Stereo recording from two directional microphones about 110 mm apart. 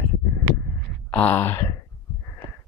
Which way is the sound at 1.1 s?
15° left (ahead or behind).